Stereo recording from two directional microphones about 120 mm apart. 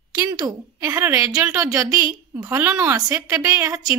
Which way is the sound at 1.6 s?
25° right (ahead or behind).